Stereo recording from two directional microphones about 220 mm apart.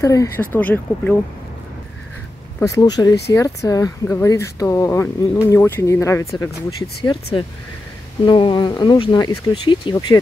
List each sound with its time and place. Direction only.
0.0 s speech: 15° left (ahead or behind)
2.6 s speech: 15° left (ahead or behind)
8.3 s speech: 20° left (ahead or behind)